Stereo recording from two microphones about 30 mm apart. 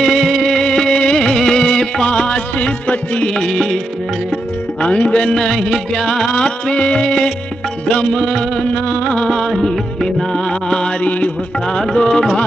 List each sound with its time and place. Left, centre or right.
0.0 s music: centre
0.7 s music: left
1.0 s music of bollywood: left
2.0 s music: left
3.3 s music: centre
4.8 s music: left
5.3 s music: left
6.3 s music: left
10.3 s music: left